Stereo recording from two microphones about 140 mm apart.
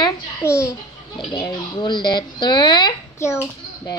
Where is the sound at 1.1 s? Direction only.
35° left (ahead or behind).